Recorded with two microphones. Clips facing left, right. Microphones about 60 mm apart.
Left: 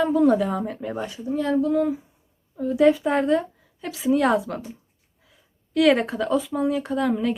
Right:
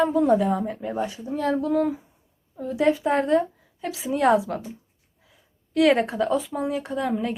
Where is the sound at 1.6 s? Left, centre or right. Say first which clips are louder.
Left 1 dB; right.